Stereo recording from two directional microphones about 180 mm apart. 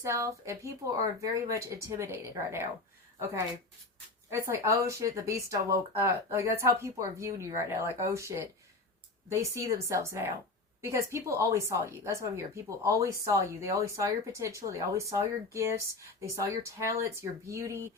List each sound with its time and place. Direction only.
0.0 s speech: 15° right (ahead or behind)
4.3 s speech: 15° right (ahead or behind)
10.8 s a sound: 15° right (ahead or behind)
11.1 s speech: 15° right (ahead or behind)